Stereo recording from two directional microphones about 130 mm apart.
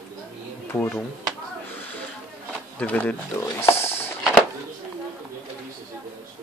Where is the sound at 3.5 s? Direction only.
20° left (ahead or behind).